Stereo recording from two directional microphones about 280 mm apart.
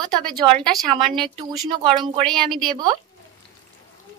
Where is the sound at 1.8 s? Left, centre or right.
Centre.